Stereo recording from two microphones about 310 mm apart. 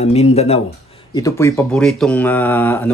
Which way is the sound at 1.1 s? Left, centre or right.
Centre.